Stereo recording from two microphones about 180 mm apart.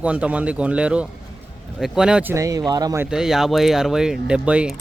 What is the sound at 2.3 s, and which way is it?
Speech, 20° right (ahead or behind).